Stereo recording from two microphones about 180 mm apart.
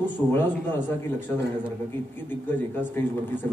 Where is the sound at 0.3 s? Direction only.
10° left (ahead or behind).